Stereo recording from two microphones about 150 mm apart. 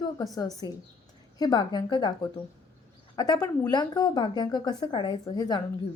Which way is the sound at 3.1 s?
25° left (ahead or behind).